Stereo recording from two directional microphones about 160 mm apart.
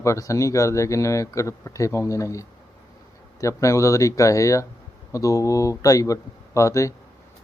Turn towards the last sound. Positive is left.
turn(degrees=20)  # may be behind; listen again after turning